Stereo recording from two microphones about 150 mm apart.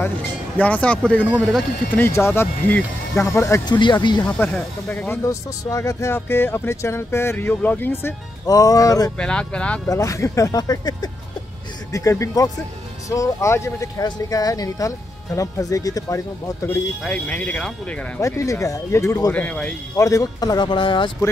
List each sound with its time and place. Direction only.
0.6 s speech: 10° left (ahead or behind); by 4.3 s 30° left (ahead or behind)
4.3 s speech: 10° left (ahead or behind)
9.2 s speech: 5° left (ahead or behind)
9.8 s speech: 20° left (ahead or behind)
17.0 s speech: 5° left (ahead or behind)
18.2 s speech: 20° left (ahead or behind)
19.3 s speech: 10° left (ahead or behind)
20.0 s speech: 20° left (ahead or behind)